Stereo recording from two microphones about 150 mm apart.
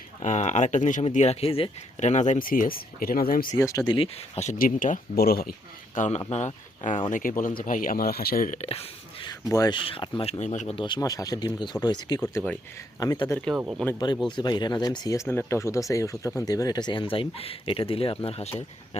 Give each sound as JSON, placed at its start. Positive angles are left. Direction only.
{"t": 0.2, "sound": "speech", "side_deg": 50}
{"t": 3.6, "sound": "speech", "side_deg": 20}
{"t": 3.9, "sound": "speech", "side_deg": 45}
{"t": 4.5, "sound": "speech", "side_deg": 65}
{"t": 7.1, "sound": "speech", "side_deg": 60}
{"t": 8.5, "sound": "speech", "side_deg": 45}
{"t": 9.3, "sound": "speech", "side_deg": 25}
{"t": 9.7, "sound": "speech", "side_deg": 35}
{"t": 10.8, "sound": "speech", "side_deg": 30}
{"t": 13.8, "sound": "speech", "side_deg": 5}
{"t": 14.3, "sound": "speech", "side_deg": 30}